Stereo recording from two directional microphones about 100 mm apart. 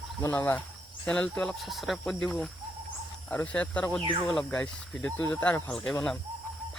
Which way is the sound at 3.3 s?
15° left (ahead or behind).